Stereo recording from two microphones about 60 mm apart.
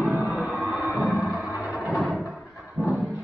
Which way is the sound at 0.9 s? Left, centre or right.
Centre.